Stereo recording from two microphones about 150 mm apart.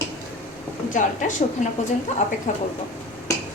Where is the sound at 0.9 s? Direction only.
60° left (ahead or behind).